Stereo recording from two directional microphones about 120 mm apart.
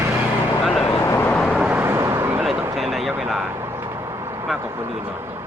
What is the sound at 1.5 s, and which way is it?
Vehicle, 10° right (ahead or behind).